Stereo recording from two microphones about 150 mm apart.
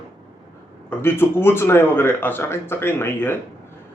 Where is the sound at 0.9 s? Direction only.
15° left (ahead or behind).